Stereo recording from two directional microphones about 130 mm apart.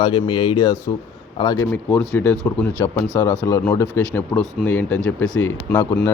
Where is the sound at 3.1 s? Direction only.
20° left (ahead or behind).